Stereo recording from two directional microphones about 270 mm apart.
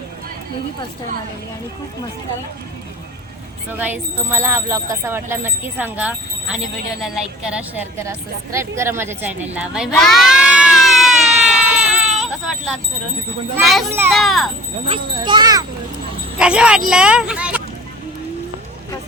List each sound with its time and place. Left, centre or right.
3.7 s a woman's voice: centre
8.5 s a sound: centre
13.7 s a woman's voice: centre
14.8 s speech: centre
16.4 s a woman's voice: centre